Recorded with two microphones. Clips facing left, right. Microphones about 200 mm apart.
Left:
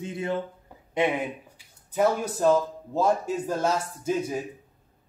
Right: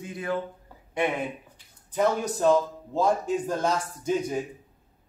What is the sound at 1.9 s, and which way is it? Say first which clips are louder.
A man's voice: left 1 dB; 5° left (ahead or behind).